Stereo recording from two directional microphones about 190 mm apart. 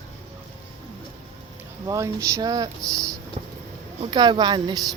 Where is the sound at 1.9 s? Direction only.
15° right (ahead or behind).